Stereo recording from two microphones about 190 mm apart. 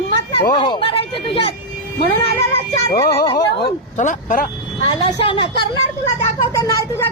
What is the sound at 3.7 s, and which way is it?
Speech, 40° left (ahead or behind).